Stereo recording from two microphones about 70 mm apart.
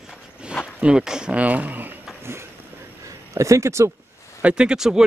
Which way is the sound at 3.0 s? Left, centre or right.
Right.